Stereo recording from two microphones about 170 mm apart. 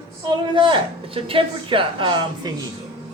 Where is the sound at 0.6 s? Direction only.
30° right (ahead or behind).